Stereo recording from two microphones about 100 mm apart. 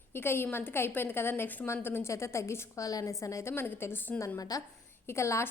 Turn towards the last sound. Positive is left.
turn(degrees=30)  # may be behind; listen again after turning